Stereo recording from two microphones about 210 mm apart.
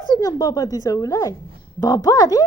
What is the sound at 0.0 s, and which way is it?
Speech, 15° left (ahead or behind).